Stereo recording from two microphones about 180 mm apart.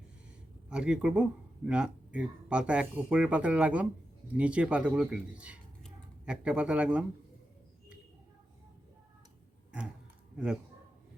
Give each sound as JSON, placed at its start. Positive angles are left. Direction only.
{"t": 0.7, "sound": "speech", "side_deg": -5}
{"t": 10.3, "sound": "speech", "side_deg": -5}